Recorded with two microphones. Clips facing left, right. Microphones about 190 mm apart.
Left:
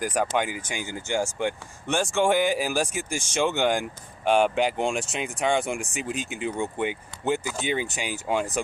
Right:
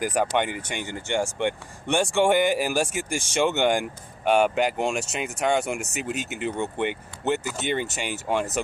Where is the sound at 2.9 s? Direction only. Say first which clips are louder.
Right 2 dB; 55° right (ahead or behind).